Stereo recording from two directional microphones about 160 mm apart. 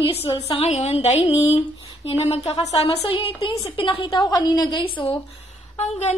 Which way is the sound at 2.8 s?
35° left (ahead or behind).